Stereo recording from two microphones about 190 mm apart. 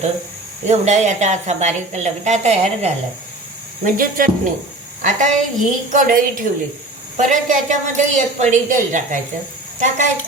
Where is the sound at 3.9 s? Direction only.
45° right (ahead or behind).